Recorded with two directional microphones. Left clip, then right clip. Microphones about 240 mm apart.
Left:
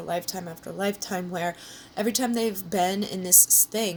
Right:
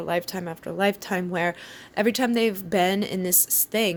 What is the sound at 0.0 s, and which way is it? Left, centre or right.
Speech, right.